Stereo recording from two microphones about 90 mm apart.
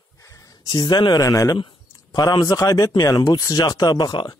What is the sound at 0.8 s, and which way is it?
Speech, 50° left (ahead or behind).